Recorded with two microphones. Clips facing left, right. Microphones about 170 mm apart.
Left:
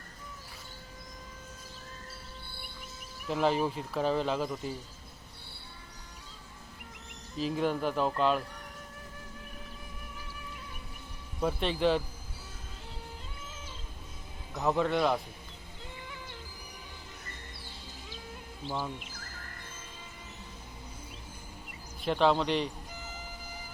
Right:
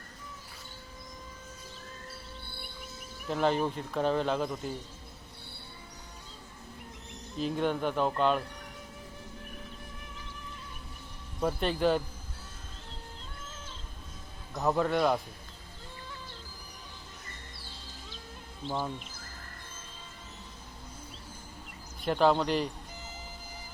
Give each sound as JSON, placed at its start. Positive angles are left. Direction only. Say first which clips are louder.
{"t": 3.2, "sound": "speech", "louder": "even", "side_deg": 0}
{"t": 7.3, "sound": "speech", "louder": "even", "side_deg": 5}
{"t": 11.3, "sound": "speech", "louder": "right 1 dB", "side_deg": 0}
{"t": 14.5, "sound": "speech", "louder": "even", "side_deg": 0}
{"t": 22.0, "sound": "speech", "louder": "right 1 dB", "side_deg": 0}